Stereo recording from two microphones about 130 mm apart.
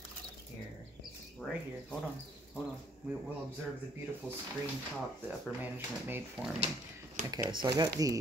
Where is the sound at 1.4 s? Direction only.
15° left (ahead or behind).